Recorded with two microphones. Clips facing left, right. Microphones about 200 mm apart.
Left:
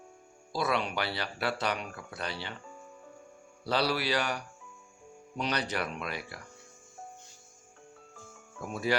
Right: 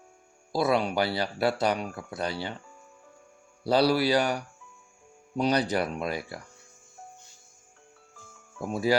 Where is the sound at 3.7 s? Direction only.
35° right (ahead or behind).